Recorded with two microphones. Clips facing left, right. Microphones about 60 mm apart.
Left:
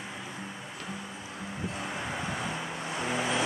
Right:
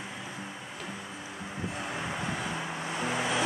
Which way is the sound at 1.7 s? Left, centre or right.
Centre.